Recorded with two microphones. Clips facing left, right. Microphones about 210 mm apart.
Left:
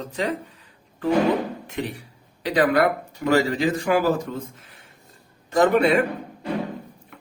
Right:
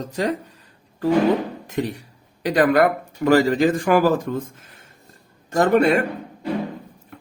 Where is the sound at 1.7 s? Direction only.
40° right (ahead or behind).